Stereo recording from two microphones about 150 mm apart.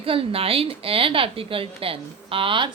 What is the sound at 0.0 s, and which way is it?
A woman's voice, 40° right (ahead or behind).